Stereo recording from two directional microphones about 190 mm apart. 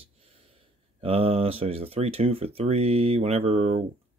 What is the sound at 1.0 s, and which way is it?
Speech, 30° right (ahead or behind).